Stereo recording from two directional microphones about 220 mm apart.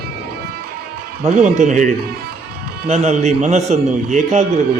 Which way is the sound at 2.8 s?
30° right (ahead or behind).